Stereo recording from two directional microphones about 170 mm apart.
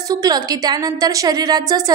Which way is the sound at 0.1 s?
20° right (ahead or behind).